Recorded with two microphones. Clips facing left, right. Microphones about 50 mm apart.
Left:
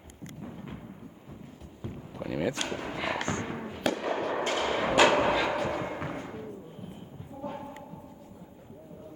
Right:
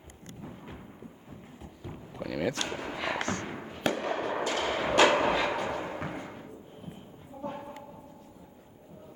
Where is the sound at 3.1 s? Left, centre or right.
Left.